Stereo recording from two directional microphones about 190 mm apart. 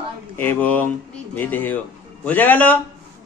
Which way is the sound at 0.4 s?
10° left (ahead or behind).